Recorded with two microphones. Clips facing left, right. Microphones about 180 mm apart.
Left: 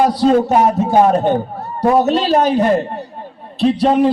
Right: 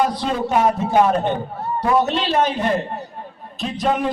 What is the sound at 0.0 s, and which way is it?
Speech, 35° left (ahead or behind).